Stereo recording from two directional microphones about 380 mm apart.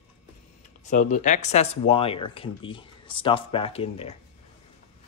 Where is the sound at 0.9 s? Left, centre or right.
Centre.